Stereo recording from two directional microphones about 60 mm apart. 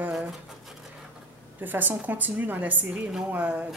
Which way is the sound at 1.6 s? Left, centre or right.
Right.